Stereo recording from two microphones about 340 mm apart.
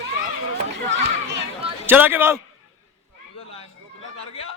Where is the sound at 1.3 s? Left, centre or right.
Centre.